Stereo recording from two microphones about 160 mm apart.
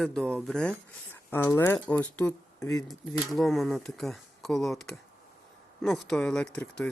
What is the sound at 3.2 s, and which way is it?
Speech, centre (ahead or behind).